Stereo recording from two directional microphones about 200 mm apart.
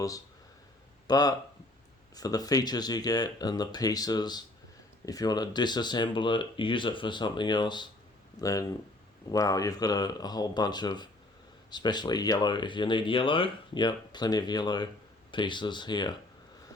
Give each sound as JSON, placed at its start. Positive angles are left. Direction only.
{"t": 1.0, "sound": "speech", "side_deg": 20}